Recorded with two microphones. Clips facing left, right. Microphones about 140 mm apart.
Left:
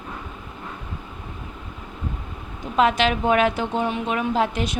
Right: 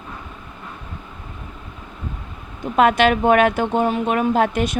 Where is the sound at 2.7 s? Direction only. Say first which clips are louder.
Right 4 dB; 55° right (ahead or behind).